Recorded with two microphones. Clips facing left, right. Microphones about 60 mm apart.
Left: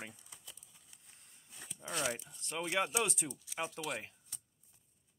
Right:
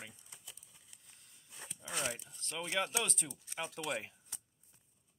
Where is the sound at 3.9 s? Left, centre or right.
Centre.